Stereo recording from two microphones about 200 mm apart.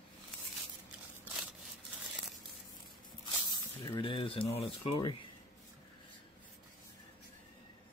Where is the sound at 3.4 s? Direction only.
20° left (ahead or behind).